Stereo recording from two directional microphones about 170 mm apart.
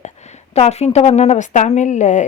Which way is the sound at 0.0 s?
40° left (ahead or behind).